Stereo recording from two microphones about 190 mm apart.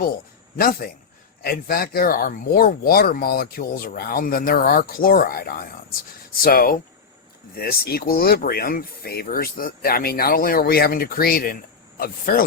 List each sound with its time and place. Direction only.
0.5 s speech: 50° left (ahead or behind)